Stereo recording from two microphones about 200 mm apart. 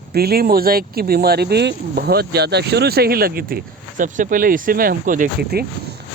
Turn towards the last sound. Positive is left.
turn(degrees=-50)  # may be behind; listen again after turning